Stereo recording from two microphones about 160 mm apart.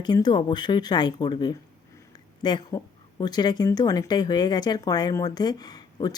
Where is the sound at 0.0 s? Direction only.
25° left (ahead or behind).